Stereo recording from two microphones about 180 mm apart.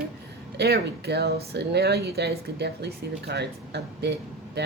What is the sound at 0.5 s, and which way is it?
Speech, 65° right (ahead or behind).